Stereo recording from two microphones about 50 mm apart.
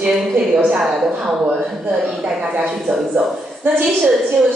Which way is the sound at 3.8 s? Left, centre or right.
Centre.